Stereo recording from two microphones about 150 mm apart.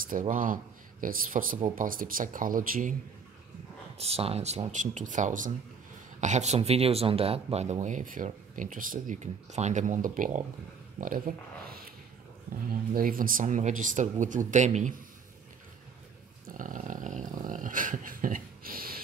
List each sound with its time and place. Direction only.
0.1 s speech: 60° right (ahead or behind)
4.0 s speech: 40° right (ahead or behind)
16.4 s dog: 60° right (ahead or behind)